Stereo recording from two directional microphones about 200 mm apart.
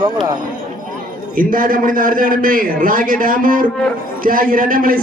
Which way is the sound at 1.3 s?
45° right (ahead or behind).